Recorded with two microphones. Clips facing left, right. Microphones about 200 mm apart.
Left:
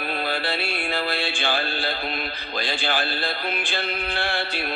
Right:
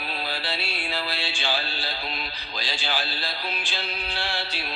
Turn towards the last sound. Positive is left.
turn(degrees=55)  # may be behind; listen again after turning